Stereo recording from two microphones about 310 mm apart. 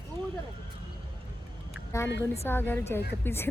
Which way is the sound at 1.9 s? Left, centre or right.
Centre.